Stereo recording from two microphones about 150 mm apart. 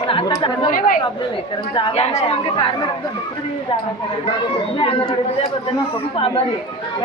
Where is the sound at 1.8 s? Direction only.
35° left (ahead or behind).